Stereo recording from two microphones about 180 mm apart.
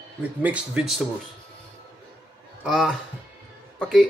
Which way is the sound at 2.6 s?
Centre (ahead or behind).